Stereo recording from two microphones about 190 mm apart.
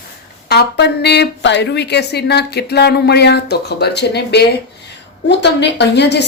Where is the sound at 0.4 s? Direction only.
60° left (ahead or behind).